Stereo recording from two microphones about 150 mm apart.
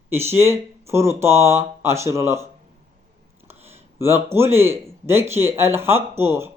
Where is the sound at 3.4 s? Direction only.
15° right (ahead or behind).